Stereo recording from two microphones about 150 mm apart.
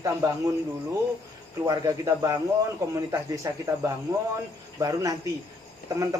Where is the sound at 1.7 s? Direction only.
25° right (ahead or behind).